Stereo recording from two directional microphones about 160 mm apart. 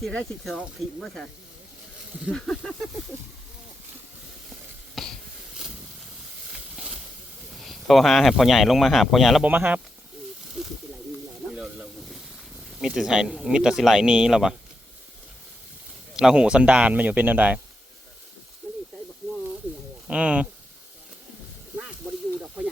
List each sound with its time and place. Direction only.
0.0 s speech: 5° left (ahead or behind)
2.3 s speech: centre (ahead or behind)
5.0 s a sound: centre (ahead or behind)
5.5 s snake: 5° right (ahead or behind)
6.7 s a sound: 5° right (ahead or behind)
7.5 s speech: centre (ahead or behind)
11.5 s snake: 5° right (ahead or behind)
16.1 s speech: 5° right (ahead or behind)
20.1 s speech: 5° right (ahead or behind)